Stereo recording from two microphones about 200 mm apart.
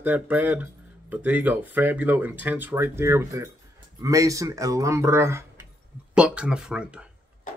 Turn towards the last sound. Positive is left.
turn(degrees=-5)  # may be behind; listen again after turning